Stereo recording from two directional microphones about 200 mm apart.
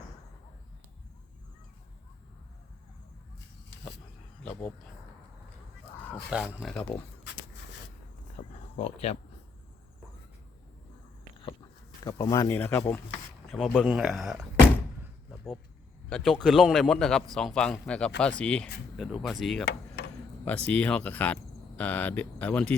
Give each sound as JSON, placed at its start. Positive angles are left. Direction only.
{"t": 6.3, "sound": "a man's voice", "side_deg": -5}
{"t": 8.4, "sound": "a sound", "side_deg": 25}
{"t": 8.7, "sound": "speech", "side_deg": 30}
{"t": 12.0, "sound": "speech", "side_deg": 15}
{"t": 13.5, "sound": "a man's voice", "side_deg": 0}
{"t": 16.0, "sound": "a man's voice", "side_deg": 5}